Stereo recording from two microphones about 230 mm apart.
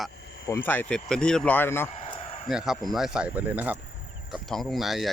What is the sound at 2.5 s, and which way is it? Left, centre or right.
Speech, centre.